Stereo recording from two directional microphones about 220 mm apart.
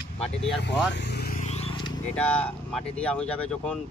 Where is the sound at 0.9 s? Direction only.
50° left (ahead or behind); by 1.9 s 20° left (ahead or behind).